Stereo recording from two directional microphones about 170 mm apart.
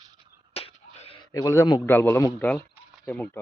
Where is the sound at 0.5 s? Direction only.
35° left (ahead or behind).